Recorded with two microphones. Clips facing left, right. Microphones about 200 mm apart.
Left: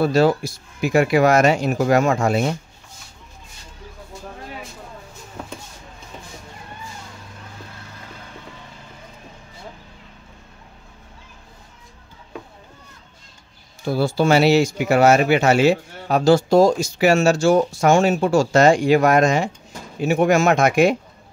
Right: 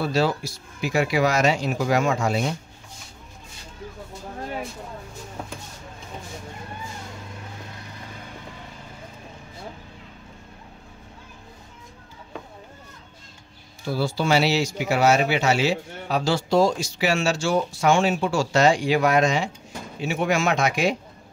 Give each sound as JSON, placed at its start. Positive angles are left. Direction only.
{"t": 0.0, "sound": "speech", "side_deg": 50}
{"t": 13.8, "sound": "speech", "side_deg": 50}